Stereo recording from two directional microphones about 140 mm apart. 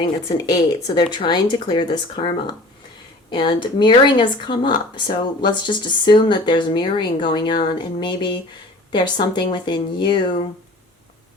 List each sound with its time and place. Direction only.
0.0 s speech: 30° left (ahead or behind)